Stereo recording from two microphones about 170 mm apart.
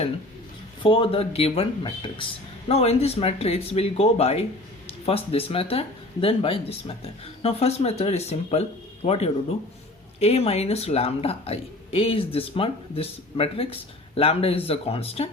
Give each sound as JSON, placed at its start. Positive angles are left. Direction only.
{"t": 0.8, "sound": "speech", "side_deg": 30}